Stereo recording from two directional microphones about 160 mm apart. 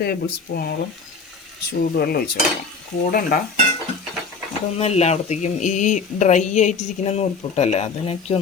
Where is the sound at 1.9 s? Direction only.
70° left (ahead or behind).